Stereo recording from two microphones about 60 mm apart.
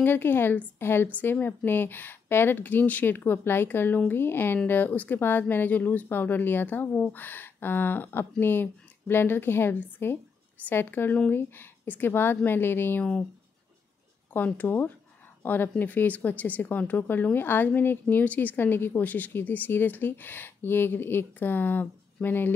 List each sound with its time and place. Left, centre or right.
0.0 s speech: left
14.3 s a woman's voice: left